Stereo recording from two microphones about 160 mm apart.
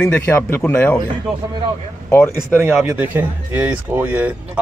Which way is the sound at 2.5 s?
15° right (ahead or behind).